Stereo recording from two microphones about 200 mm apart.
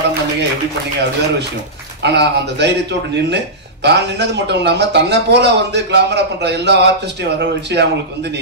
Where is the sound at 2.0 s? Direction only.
60° right (ahead or behind).